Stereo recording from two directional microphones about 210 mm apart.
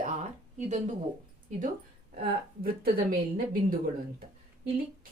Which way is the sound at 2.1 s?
45° right (ahead or behind).